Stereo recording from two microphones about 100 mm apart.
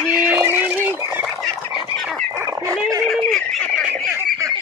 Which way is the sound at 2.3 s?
30° right (ahead or behind).